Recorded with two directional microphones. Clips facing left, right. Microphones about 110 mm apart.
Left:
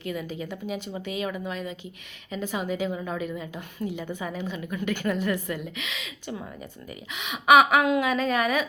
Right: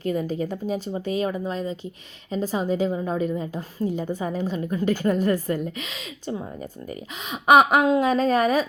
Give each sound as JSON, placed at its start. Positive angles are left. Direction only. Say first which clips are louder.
{"t": 0.0, "sound": "a woman's voice", "louder": "right 7 dB", "side_deg": -40}